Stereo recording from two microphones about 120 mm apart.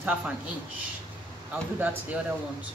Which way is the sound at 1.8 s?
15° right (ahead or behind).